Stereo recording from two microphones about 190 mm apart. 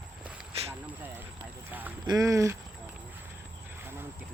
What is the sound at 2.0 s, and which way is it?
Speech, 15° right (ahead or behind).